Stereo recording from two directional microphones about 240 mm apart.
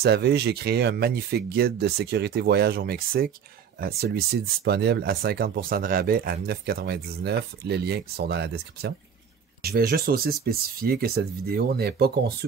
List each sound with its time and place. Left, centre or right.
0.0 s speech: right